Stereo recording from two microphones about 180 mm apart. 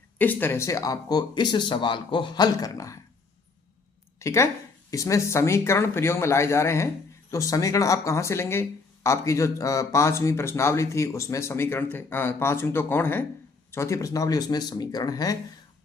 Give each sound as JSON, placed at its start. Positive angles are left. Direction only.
{"t": 0.2, "sound": "speech", "side_deg": 10}
{"t": 4.2, "sound": "speech", "side_deg": 15}